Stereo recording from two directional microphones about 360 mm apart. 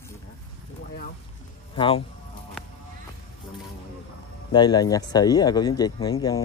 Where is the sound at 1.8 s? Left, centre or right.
Centre.